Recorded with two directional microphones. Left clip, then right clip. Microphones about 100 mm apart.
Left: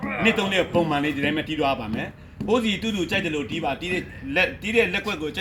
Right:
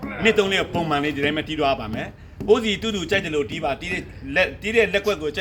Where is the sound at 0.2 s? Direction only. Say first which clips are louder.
Right 3 dB; 35° right (ahead or behind).